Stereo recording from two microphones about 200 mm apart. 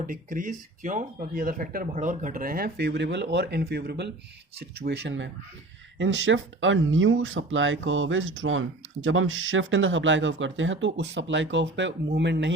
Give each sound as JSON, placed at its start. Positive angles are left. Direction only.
{"t": 0.1, "sound": "speech", "side_deg": -40}